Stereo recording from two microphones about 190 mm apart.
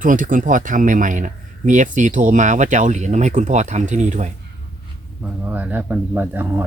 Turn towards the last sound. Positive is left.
turn(degrees=-10)  # may be behind; listen again after turning